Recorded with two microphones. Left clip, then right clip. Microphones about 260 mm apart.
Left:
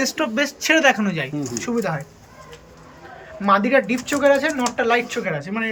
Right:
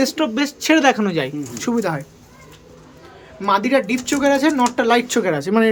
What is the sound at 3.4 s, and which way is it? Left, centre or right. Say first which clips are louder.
Speech: even; centre.